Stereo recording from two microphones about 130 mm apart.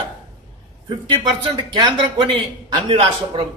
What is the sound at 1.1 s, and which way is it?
A man's voice, 35° right (ahead or behind).